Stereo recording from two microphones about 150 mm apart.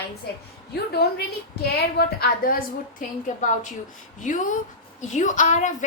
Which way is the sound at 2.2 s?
75° left (ahead or behind).